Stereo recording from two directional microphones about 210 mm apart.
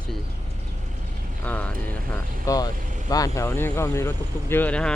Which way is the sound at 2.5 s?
15° left (ahead or behind).